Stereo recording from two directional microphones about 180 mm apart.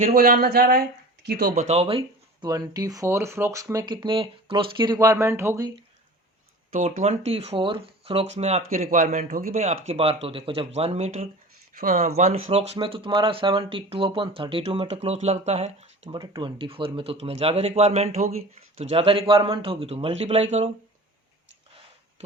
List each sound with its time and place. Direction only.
0.0 s speech: 55° right (ahead or behind)
1.5 s speech: 35° right (ahead or behind); by 5.7 s 15° right (ahead or behind)
6.7 s speech: 45° right (ahead or behind)
9.8 s speech: 35° right (ahead or behind)
16.1 s speech: 20° right (ahead or behind); by 20.7 s 35° right (ahead or behind)